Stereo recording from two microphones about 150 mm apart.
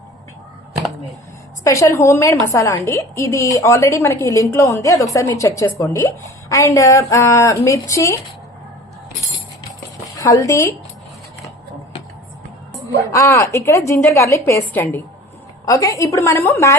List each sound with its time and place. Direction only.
1.6 s a woman's voice: 20° left (ahead or behind)
10.2 s a woman's voice: 20° left (ahead or behind)
13.1 s a woman's voice: 20° left (ahead or behind)